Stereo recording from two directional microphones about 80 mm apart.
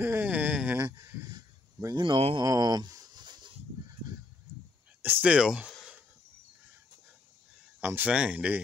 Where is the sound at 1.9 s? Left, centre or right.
Right.